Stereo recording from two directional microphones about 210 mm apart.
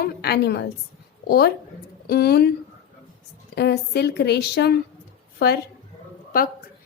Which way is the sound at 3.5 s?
50° left (ahead or behind).